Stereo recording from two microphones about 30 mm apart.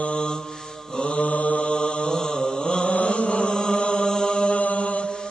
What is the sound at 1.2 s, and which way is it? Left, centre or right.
Mantra, left.